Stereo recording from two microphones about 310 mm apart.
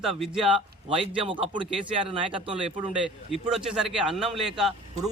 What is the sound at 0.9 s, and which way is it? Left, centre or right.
A man's voice, centre.